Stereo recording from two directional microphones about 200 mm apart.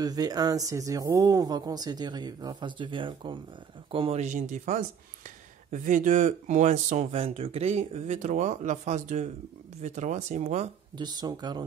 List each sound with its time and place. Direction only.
0.0 s speech: 20° right (ahead or behind); by 10.7 s 35° right (ahead or behind)
11.0 s speech: 20° right (ahead or behind)